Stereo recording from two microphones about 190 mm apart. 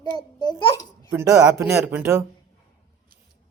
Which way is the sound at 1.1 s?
15° right (ahead or behind).